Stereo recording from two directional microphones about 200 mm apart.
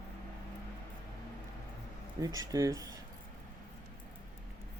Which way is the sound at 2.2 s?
20° right (ahead or behind).